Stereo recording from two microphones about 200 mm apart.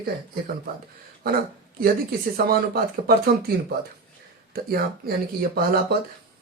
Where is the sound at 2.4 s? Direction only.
50° right (ahead or behind).